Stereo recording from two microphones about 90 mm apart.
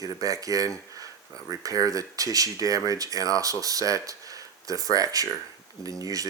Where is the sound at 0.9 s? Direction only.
40° right (ahead or behind).